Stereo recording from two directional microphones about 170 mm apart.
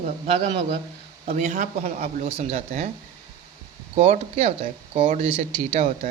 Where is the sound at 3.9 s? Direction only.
35° right (ahead or behind).